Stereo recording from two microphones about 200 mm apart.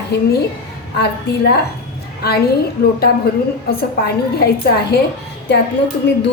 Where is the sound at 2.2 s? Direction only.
50° left (ahead or behind).